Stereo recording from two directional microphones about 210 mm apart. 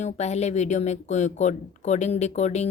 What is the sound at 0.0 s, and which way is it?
A woman's voice, 30° left (ahead or behind).